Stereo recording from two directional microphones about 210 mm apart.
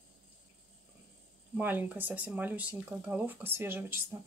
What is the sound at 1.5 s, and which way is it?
Speech, 10° right (ahead or behind).